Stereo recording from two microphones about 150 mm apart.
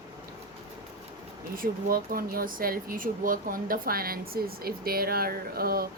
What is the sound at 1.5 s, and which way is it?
Speech, 70° right (ahead or behind).